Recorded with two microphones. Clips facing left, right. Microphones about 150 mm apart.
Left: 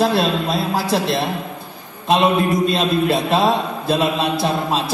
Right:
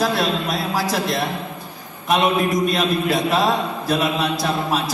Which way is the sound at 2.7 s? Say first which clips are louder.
Left 2 dB; 30° left (ahead or behind).